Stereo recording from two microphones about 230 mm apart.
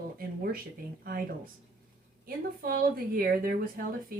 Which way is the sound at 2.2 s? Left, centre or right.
Right.